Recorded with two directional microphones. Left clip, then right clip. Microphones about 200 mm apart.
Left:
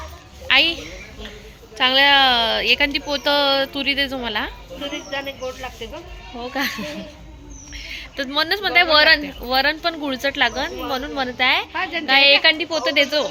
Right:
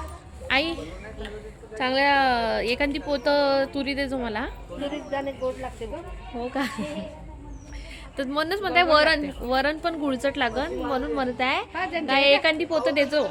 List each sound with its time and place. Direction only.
0.4 s music: 5° right (ahead or behind)
1.7 s speech: centre (ahead or behind)
4.8 s speech: 15° right (ahead or behind)
6.4 s speech: 5° right (ahead or behind)